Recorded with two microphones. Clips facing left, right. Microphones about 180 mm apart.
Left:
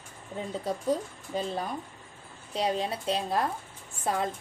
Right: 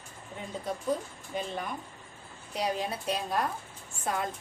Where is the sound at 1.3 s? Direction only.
35° left (ahead or behind).